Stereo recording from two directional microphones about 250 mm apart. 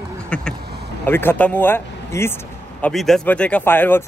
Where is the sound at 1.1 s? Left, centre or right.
Centre.